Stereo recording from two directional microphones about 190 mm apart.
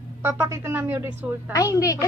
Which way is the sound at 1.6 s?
15° left (ahead or behind).